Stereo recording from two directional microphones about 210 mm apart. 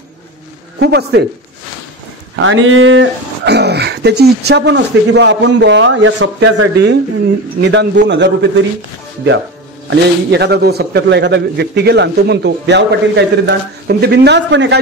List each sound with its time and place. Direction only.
0.7 s speech: 50° right (ahead or behind)
2.3 s speech: 70° right (ahead or behind)
9.8 s a man's voice: 55° right (ahead or behind)